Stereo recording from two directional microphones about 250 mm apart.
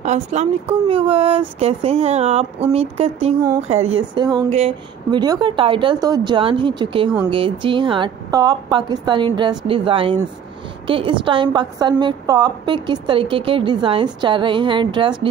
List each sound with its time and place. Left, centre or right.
0.0 s a woman's voice: right